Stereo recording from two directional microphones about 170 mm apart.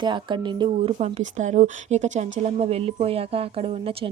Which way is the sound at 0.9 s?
45° right (ahead or behind).